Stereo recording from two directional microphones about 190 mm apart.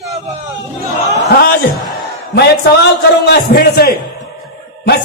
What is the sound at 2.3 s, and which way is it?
A man's voice, 60° left (ahead or behind).